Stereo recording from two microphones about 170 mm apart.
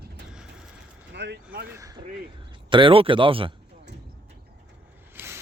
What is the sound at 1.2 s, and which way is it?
Vehicle, 80° right.